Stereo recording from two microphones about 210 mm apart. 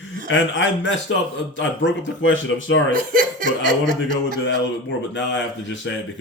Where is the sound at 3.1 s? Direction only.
40° right (ahead or behind).